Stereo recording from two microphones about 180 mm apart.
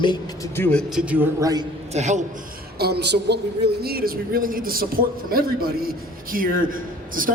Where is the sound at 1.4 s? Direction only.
20° right (ahead or behind).